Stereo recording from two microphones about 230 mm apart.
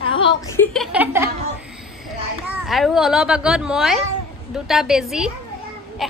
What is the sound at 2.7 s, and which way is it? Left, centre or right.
A woman's voice, centre.